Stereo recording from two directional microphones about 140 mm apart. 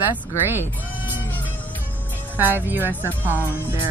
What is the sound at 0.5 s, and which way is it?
Speech, 15° right (ahead or behind).